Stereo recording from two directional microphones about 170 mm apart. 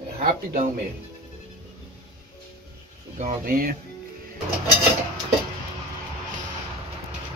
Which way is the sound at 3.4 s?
60° right (ahead or behind).